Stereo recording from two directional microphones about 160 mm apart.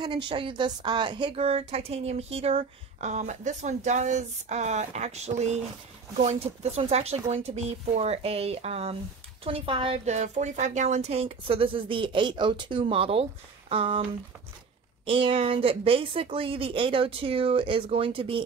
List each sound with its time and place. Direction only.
0.0 s a woman's voice: 30° right (ahead or behind)
15.0 s a woman's voice: 35° right (ahead or behind)